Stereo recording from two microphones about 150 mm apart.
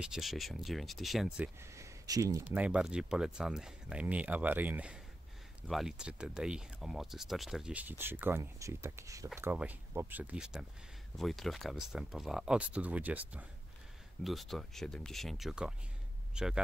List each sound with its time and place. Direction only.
0.0 s speech: 5° right (ahead or behind)
1.7 s a sound: 20° right (ahead or behind)
2.4 s speech: 10° right (ahead or behind)
14.2 s speech: centre (ahead or behind)